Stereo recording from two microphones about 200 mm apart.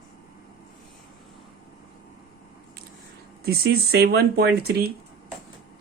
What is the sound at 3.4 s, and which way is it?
Speech, 50° right (ahead or behind).